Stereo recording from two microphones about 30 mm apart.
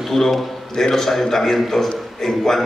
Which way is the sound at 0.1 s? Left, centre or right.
Centre.